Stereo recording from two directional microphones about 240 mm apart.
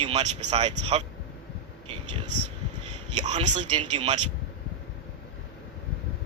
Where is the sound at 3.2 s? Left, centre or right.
Right.